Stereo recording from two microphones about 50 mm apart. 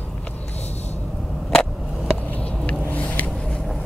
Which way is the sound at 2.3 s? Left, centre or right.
Left.